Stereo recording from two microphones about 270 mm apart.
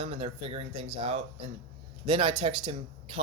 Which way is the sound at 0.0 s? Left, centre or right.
Centre.